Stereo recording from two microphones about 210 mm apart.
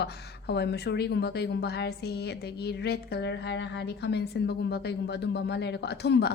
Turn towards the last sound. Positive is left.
turn(degrees=55)  # may be behind; listen again after turning